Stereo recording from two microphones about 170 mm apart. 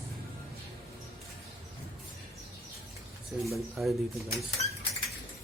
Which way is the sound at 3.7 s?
Centre (ahead or behind).